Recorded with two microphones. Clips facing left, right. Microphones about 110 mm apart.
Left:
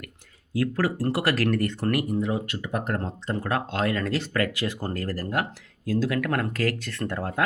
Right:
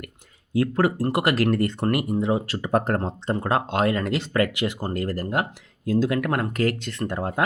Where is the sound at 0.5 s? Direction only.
25° right (ahead or behind).